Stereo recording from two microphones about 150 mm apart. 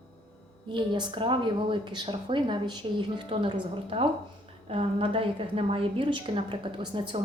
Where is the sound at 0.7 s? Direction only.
35° right (ahead or behind).